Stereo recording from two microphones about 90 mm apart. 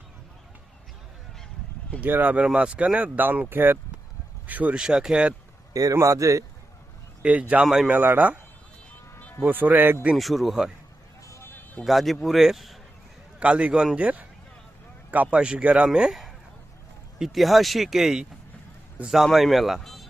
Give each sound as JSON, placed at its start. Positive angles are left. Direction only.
{"t": 2.0, "sound": "speech", "side_deg": -20}
{"t": 5.7, "sound": "a man's voice", "side_deg": -40}
{"t": 7.2, "sound": "speech", "side_deg": -15}
{"t": 7.9, "sound": "speech", "side_deg": -20}
{"t": 9.4, "sound": "speech", "side_deg": -20}
{"t": 10.2, "sound": "speech", "side_deg": 0}
{"t": 11.3, "sound": "music", "side_deg": 25}
{"t": 11.9, "sound": "speech", "side_deg": 0}
{"t": 13.4, "sound": "speech", "side_deg": -15}